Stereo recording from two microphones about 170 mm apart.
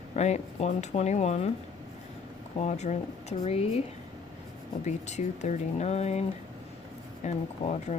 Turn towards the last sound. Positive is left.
turn(degrees=40)  # may be behind; listen again after turning